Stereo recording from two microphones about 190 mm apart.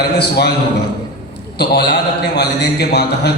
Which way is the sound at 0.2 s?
60° left (ahead or behind).